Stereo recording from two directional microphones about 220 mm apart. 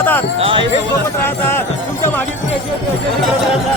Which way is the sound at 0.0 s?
10° left (ahead or behind).